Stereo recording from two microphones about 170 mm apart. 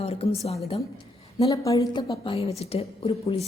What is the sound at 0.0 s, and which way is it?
Speech, 35° left (ahead or behind).